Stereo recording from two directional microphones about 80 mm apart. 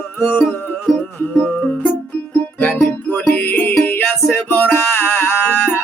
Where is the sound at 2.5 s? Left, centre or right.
Centre.